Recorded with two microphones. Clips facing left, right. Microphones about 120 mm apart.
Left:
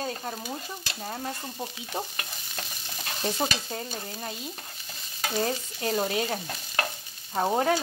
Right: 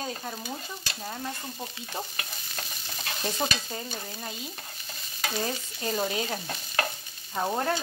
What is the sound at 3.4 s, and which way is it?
Speech, 5° left (ahead or behind).